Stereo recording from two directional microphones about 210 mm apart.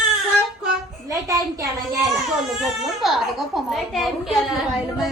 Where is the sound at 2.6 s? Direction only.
Centre (ahead or behind).